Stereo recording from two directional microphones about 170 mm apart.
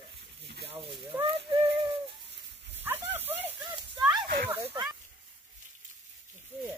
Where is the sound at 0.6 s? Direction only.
30° right (ahead or behind).